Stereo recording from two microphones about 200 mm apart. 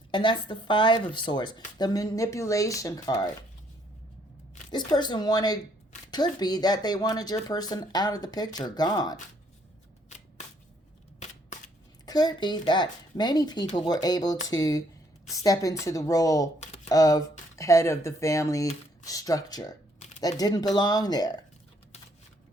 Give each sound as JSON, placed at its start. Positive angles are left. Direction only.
{"t": 0.1, "sound": "speech", "side_deg": 25}
{"t": 4.7, "sound": "speech", "side_deg": 20}
{"t": 11.2, "sound": "a sound", "side_deg": 35}
{"t": 12.0, "sound": "speech", "side_deg": 20}
{"t": 16.6, "sound": "a sound", "side_deg": 35}
{"t": 16.9, "sound": "speech", "side_deg": 20}